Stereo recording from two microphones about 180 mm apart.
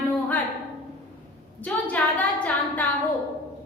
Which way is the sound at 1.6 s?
10° left (ahead or behind).